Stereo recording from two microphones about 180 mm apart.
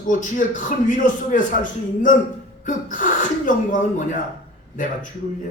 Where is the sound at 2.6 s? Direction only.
45° left (ahead or behind).